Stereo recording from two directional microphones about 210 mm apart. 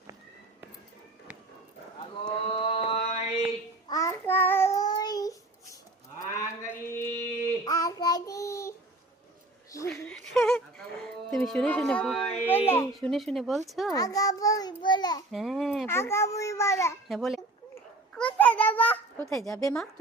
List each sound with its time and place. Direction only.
2.2 s mantra: 25° left (ahead or behind)
3.8 s child singing: 15° left (ahead or behind)
6.6 s child singing: 15° left (ahead or behind)
9.9 s a sound: 5° left (ahead or behind)
11.3 s speech: centre (ahead or behind)
13.9 s child singing: 15° left (ahead or behind)
15.3 s speech: centre (ahead or behind)
15.9 s a sound: 10° left (ahead or behind)
17.1 s speech: centre (ahead or behind)
18.1 s a sound: 5° left (ahead or behind)
19.4 s speech: 15° left (ahead or behind)